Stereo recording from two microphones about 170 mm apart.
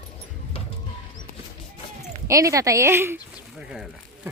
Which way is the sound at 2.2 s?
20° right (ahead or behind).